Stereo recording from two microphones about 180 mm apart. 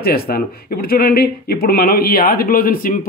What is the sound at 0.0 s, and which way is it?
Speech, 60° left (ahead or behind).